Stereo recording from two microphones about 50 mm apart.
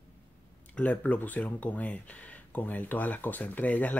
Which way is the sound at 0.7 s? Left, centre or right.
Left.